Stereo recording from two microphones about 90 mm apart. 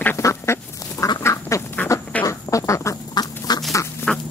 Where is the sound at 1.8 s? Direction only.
20° left (ahead or behind).